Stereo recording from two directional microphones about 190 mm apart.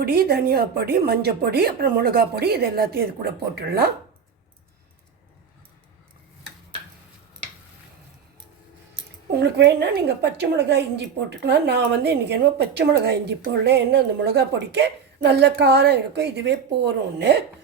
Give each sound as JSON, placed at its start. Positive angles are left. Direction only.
{"t": 0.0, "sound": "a woman's voice", "side_deg": -50}
{"t": 9.3, "sound": "a woman's voice", "side_deg": -60}